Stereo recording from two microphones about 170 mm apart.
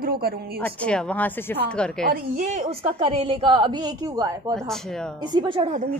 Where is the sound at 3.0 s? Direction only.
30° right (ahead or behind).